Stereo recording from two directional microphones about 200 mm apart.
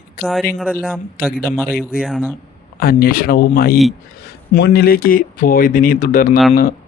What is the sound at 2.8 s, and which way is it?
A man's voice, 50° left (ahead or behind).